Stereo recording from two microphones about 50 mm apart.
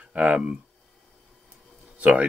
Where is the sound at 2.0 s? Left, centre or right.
Right.